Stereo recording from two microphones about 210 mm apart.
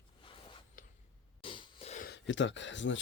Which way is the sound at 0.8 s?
40° left (ahead or behind).